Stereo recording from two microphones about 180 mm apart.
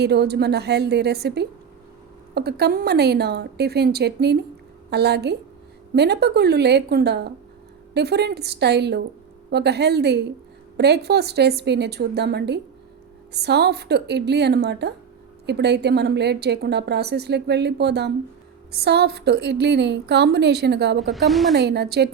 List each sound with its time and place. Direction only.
0.0 s a woman's voice: 65° right (ahead or behind)
21.1 s a woman's voice: centre (ahead or behind)
21.5 s a woman's voice: 70° right (ahead or behind)